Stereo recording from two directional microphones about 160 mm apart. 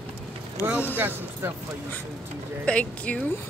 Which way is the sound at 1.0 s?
10° right (ahead or behind).